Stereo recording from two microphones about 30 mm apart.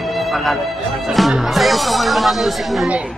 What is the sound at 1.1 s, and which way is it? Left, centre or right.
Speech, centre.